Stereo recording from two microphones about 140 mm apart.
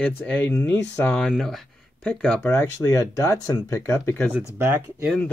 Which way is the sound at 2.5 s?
25° left (ahead or behind).